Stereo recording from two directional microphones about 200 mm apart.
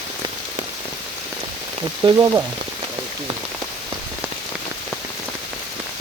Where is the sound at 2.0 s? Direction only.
20° right (ahead or behind).